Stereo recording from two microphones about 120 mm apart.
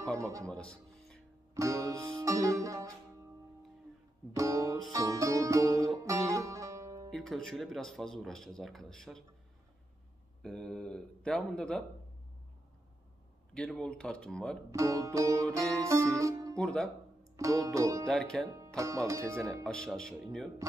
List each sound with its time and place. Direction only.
0.2 s music: 25° right (ahead or behind)
0.5 s music: 5° left (ahead or behind)
1.5 s music: 25° right (ahead or behind)
4.3 s music: 25° right (ahead or behind)
7.1 s speech: 5° left (ahead or behind)
10.4 s speech: 5° left (ahead or behind)
13.7 s speech: 5° left (ahead or behind)
14.7 s music: 25° right (ahead or behind)
16.5 s speech: 5° left (ahead or behind)
17.4 s music: 30° right (ahead or behind)
18.0 s speech: 5° left (ahead or behind)
18.8 s music: 25° right (ahead or behind)
19.6 s speech: 5° left (ahead or behind)